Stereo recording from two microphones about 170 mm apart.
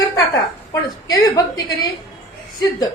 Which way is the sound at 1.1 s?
20° left (ahead or behind).